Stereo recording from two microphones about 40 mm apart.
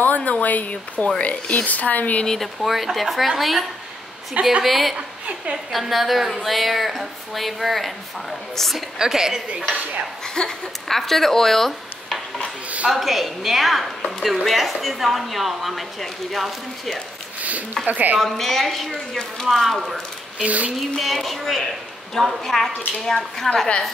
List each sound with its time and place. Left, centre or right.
0.0 s speech: left
1.7 s speech: left
2.2 s a woman's voice: centre
2.6 s a woman's voice: centre
4.6 s speech: centre
8.7 s a woman's voice: centre
9.5 s dishes: right
10.2 s speech: centre
10.9 s speech: centre
17.4 s a woman's voice: right
18.2 s speech: centre
20.4 s a sound: right
21.0 s a woman's voice: centre